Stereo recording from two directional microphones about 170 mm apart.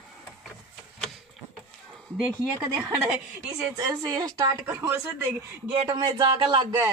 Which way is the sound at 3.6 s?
20° right (ahead or behind).